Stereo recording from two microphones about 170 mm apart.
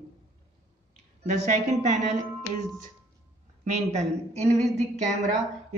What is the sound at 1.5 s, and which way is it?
Speech, 45° right (ahead or behind).